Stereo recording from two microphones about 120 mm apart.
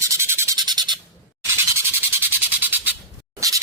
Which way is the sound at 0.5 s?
35° right (ahead or behind).